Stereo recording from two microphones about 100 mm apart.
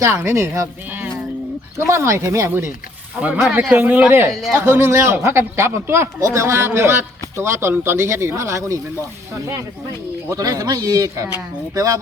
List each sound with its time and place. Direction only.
0.0 s speech: 25° right (ahead or behind)
1.9 s speech: 30° right (ahead or behind)
3.5 s speech: 15° right (ahead or behind)
4.3 s speech: centre (ahead or behind)
4.5 s speech: 20° right (ahead or behind)
10.2 s a man's voice: 35° right (ahead or behind)